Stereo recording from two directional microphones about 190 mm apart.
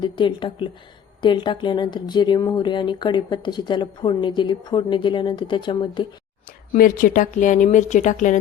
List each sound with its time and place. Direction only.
0.0 s speech: 25° left (ahead or behind)
6.7 s speech: 45° left (ahead or behind)